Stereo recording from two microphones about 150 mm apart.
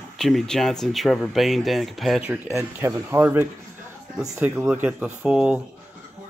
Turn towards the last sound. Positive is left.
turn(degrees=-5)  # may be behind; listen again after turning